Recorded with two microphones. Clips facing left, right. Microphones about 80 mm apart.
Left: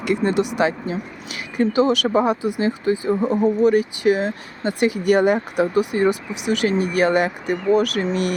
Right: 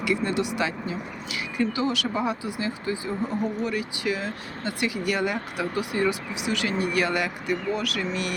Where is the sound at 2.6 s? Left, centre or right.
Left.